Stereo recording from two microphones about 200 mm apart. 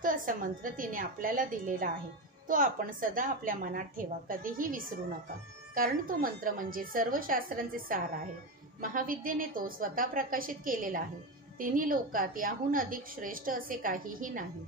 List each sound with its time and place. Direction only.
0.0 s a woman's voice: 45° right (ahead or behind)